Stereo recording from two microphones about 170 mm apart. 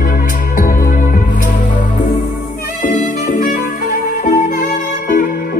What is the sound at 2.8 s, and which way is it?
Music, 50° left (ahead or behind).